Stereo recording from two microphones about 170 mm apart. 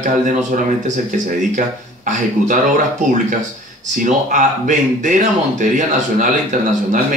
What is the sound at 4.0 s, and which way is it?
A man's voice, 50° right (ahead or behind).